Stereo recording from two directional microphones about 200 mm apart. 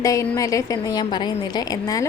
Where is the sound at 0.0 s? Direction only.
15° left (ahead or behind).